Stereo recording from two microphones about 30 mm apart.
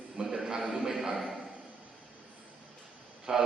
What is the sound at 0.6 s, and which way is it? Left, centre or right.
Speech, centre.